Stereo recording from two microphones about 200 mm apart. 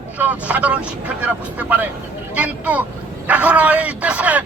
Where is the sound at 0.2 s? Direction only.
5° right (ahead or behind).